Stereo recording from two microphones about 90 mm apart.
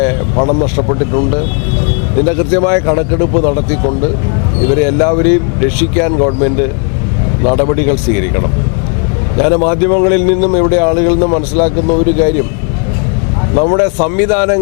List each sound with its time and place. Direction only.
0.0 s speech: 25° left (ahead or behind)
13.6 s speech: 20° left (ahead or behind)